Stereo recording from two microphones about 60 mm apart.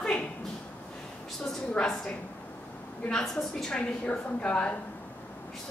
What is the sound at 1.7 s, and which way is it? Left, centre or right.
Speech, centre.